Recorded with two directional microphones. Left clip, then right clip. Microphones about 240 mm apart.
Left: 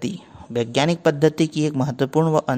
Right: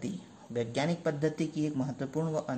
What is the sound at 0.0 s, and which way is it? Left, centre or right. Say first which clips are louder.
A man's voice: left 11 dB; left.